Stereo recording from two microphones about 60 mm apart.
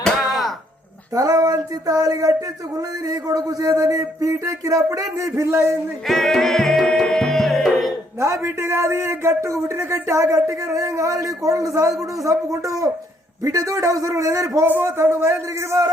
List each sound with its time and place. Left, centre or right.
1.1 s a sound: right
5.1 s a man's voice: right
6.1 s music: centre
8.2 s a man's voice: right
9.7 s speech: right
10.2 s a man's voice: right
14.7 s a man's voice: right